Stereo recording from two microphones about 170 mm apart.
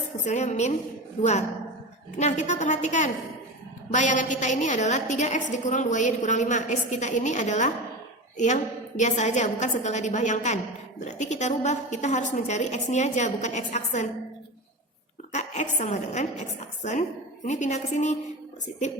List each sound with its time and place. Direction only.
0.3 s a woman's voice: 40° left (ahead or behind)
15.3 s a woman's voice: 45° left (ahead or behind)